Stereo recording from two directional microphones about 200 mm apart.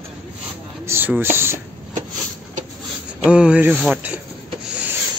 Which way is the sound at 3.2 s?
5° right (ahead or behind).